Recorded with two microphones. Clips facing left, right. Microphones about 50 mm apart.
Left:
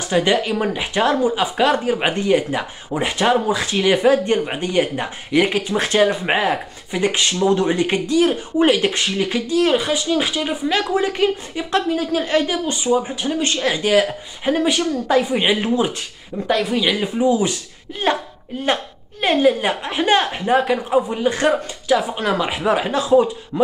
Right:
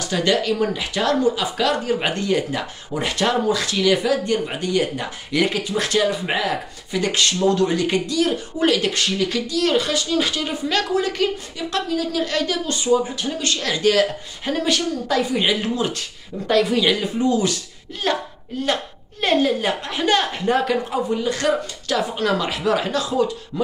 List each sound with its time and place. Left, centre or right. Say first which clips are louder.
0.1 s speech: left 2 dB; left
16.4 s speech: right 1 dB; centre
17.0 s speech: left 2 dB; centre
19.2 s speech: left 3 dB; centre